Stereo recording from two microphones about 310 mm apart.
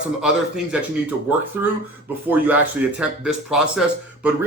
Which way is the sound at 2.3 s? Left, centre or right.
Centre.